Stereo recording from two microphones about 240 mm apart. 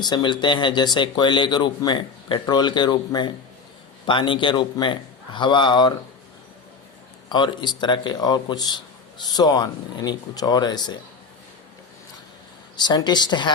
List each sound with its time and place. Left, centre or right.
0.0 s a man's voice: centre
7.3 s speech: centre
12.7 s speech: centre